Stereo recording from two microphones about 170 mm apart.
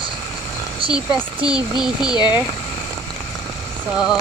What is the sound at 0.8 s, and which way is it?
Speech, 30° right (ahead or behind).